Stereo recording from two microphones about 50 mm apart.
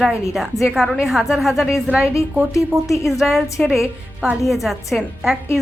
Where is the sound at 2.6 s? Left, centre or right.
Left.